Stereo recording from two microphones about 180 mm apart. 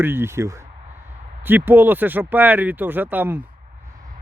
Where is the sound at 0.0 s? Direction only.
15° right (ahead or behind).